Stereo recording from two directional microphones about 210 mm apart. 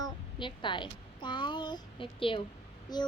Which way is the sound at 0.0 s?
20° left (ahead or behind).